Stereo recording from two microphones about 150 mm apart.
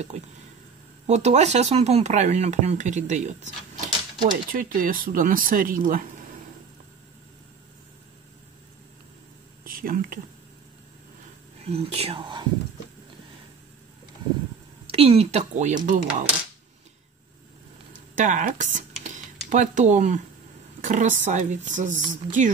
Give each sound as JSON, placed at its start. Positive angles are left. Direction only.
{"t": 0.1, "sound": "speech", "side_deg": -50}
{"t": 4.5, "sound": "speech", "side_deg": -70}
{"t": 9.7, "sound": "speech", "side_deg": -70}
{"t": 11.6, "sound": "speech", "side_deg": -40}
{"t": 14.9, "sound": "speech", "side_deg": -40}
{"t": 18.1, "sound": "a woman's voice", "side_deg": -55}
{"t": 19.0, "sound": "typing", "side_deg": -55}
{"t": 20.8, "sound": "a woman's voice", "side_deg": -55}